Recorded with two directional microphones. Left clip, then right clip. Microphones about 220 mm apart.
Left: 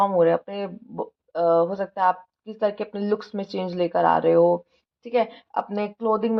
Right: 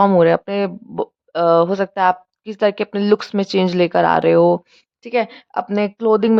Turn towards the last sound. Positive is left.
turn(degrees=-40)  # may be behind; listen again after turning